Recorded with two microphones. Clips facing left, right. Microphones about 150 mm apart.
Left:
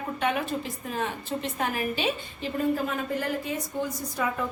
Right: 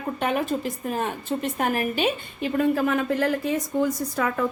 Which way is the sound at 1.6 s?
55° right (ahead or behind).